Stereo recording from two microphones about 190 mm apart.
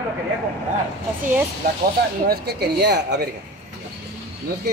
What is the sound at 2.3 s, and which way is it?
Speech, 60° right (ahead or behind).